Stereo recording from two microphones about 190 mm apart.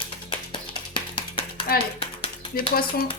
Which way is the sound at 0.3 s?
25° left (ahead or behind).